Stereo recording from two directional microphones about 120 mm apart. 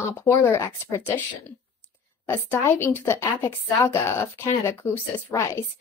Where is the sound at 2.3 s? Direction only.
25° left (ahead or behind).